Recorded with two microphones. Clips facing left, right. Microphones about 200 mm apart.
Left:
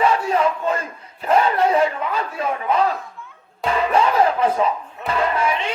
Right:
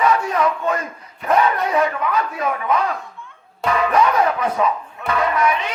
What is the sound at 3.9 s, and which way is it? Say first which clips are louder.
Music: left 1 dB; 30° left (ahead or behind).